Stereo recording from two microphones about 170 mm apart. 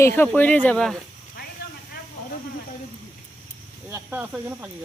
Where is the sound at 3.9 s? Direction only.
15° right (ahead or behind).